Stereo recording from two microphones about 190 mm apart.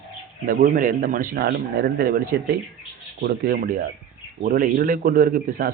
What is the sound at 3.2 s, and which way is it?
Speech, 50° right (ahead or behind).